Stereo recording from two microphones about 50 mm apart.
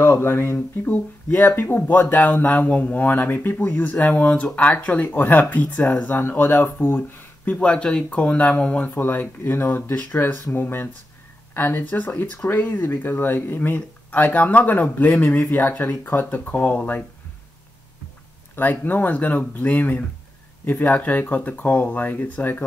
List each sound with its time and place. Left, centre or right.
0.0 s speech: left
0.8 s speech: left
5.0 s speech: left
5.6 s speech: left
7.5 s speech: left
12.4 s speech: left
18.6 s speech: left